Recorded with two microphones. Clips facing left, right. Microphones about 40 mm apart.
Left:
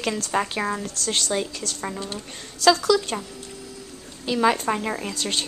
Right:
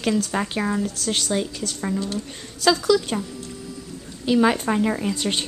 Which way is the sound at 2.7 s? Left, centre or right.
Centre.